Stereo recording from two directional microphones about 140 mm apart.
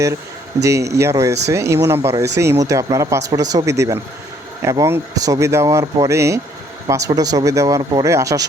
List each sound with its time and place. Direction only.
0.6 s speech: 20° right (ahead or behind)